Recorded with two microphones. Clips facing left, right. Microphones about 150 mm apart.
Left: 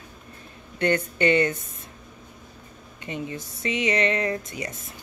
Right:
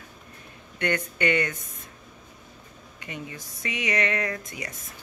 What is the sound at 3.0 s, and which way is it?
Speech, 25° left (ahead or behind).